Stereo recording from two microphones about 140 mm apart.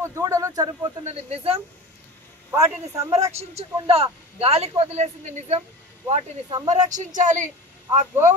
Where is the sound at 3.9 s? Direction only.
45° right (ahead or behind).